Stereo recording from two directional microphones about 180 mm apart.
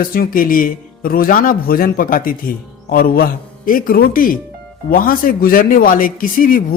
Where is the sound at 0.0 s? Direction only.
55° left (ahead or behind).